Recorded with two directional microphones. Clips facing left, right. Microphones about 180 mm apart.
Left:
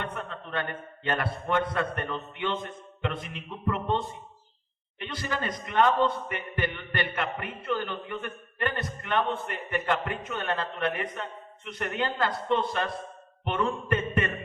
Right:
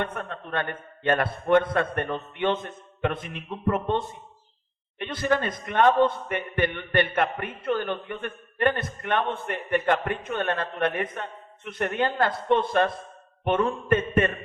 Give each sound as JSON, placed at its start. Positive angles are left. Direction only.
{"t": 0.0, "sound": "a man's voice", "side_deg": -50}
{"t": 4.9, "sound": "a man's voice", "side_deg": -50}